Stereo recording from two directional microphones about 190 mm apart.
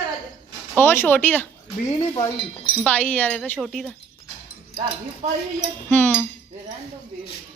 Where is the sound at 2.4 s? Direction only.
25° left (ahead or behind).